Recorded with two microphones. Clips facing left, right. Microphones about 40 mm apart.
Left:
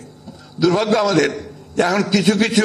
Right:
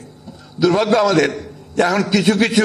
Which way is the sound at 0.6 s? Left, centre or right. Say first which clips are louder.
Right 2 dB; centre.